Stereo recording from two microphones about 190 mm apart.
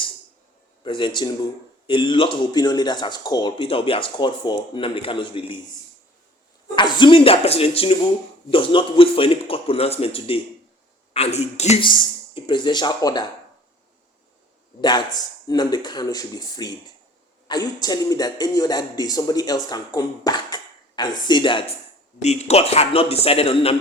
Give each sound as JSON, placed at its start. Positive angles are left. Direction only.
{"t": 0.9, "sound": "speech", "side_deg": 25}
{"t": 6.7, "sound": "a man's voice", "side_deg": 25}
{"t": 14.8, "sound": "speech", "side_deg": 20}
{"t": 22.2, "sound": "a man's voice", "side_deg": 35}